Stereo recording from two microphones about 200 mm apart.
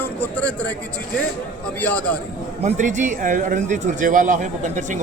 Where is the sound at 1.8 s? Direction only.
10° left (ahead or behind).